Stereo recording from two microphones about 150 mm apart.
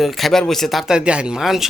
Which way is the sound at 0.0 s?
Centre (ahead or behind).